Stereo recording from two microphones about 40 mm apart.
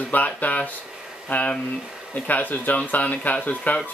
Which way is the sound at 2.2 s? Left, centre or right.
Left.